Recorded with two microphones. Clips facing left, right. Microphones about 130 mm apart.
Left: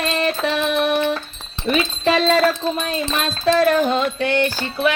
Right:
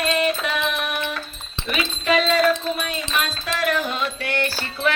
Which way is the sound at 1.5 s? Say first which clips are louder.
Left 6 dB; 35° left (ahead or behind).